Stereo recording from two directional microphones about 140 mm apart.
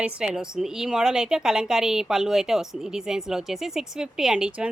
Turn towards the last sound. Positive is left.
turn(degrees=-5)  # may be behind; listen again after turning